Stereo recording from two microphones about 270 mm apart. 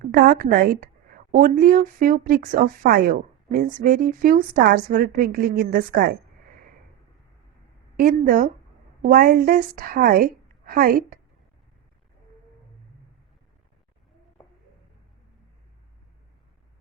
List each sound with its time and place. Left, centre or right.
0.0 s a woman's voice: right
7.9 s a woman's voice: right